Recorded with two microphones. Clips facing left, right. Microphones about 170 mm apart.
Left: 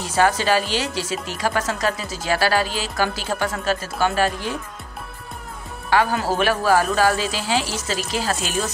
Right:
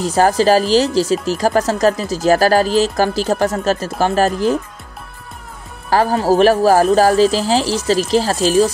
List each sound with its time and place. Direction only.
0.0 s speech: 40° right (ahead or behind)
5.9 s speech: 35° right (ahead or behind)